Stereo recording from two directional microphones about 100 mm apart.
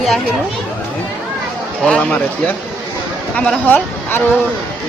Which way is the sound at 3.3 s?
15° left (ahead or behind).